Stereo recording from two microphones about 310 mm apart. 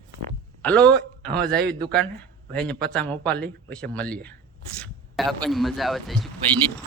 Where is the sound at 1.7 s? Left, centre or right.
Centre.